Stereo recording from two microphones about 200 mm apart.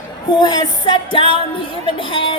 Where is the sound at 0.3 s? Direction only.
20° left (ahead or behind).